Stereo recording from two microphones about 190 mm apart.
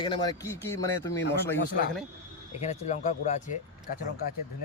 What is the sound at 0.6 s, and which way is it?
Speech, 15° left (ahead or behind).